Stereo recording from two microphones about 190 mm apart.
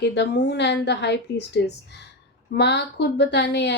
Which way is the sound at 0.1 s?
65° left (ahead or behind).